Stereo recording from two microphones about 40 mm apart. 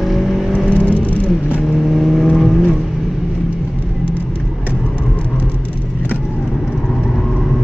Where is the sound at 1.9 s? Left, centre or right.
Centre.